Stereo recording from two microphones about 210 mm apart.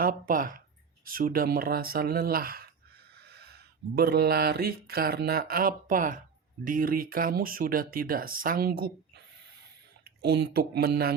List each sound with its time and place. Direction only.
0.0 s speech: 40° right (ahead or behind)